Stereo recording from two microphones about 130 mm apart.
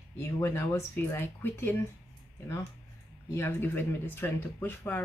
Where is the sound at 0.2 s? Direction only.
20° left (ahead or behind).